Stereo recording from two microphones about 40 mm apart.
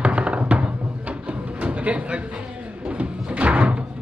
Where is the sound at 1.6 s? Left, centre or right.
Right.